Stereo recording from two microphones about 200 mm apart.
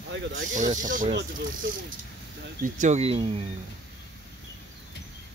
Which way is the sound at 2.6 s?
35° right (ahead or behind).